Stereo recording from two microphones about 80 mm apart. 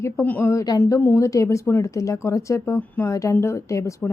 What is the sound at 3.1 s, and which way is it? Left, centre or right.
Speech, left.